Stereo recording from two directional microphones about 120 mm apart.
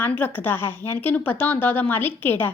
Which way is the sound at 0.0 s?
15° left (ahead or behind).